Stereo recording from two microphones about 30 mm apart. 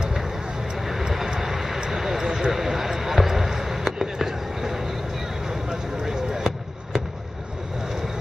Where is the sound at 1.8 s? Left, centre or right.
Centre.